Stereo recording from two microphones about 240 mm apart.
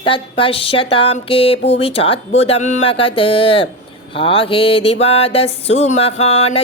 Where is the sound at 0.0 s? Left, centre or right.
Left.